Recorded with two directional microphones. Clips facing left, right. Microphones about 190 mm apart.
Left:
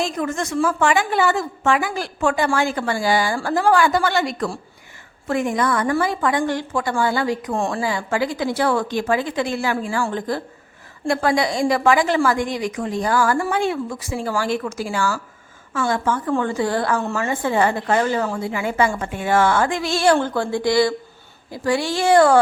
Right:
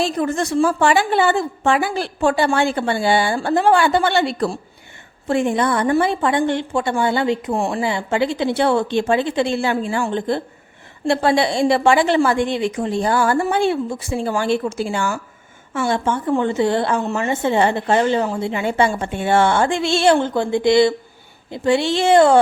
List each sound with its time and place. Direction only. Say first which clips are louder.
0.0 s a woman's voice: right 3 dB; 35° right (ahead or behind)